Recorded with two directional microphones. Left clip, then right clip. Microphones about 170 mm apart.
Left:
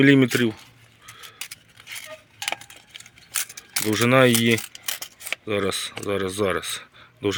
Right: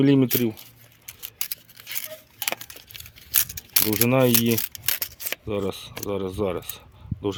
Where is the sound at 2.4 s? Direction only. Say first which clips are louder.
Left 1 dB; 90° right.